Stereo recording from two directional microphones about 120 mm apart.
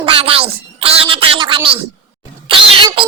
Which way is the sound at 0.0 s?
50° right (ahead or behind).